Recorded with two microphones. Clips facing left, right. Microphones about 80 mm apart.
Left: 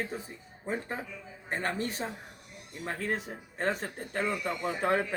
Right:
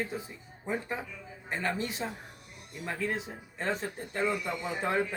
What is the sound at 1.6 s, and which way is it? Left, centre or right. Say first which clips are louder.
Speech: even; left.